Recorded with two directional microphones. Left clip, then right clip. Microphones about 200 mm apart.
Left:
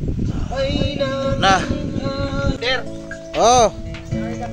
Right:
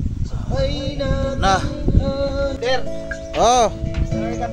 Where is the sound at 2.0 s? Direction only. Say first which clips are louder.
Right 4 dB; 60° right (ahead or behind).